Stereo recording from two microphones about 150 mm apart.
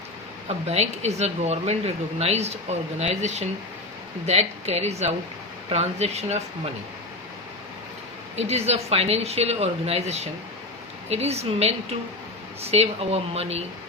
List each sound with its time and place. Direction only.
0.4 s a woman's voice: 45° right (ahead or behind)
8.4 s a woman's voice: 45° right (ahead or behind)